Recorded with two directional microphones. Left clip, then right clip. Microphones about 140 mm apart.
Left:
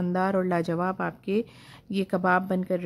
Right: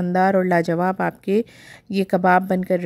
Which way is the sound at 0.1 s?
35° right (ahead or behind).